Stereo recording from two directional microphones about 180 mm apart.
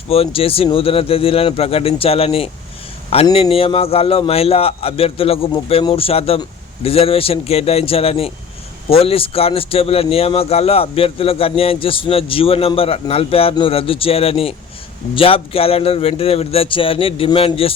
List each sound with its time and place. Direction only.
0.1 s speech: 30° left (ahead or behind)